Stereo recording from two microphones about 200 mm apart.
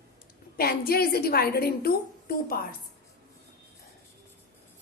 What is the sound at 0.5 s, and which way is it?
A woman's voice, 50° left (ahead or behind).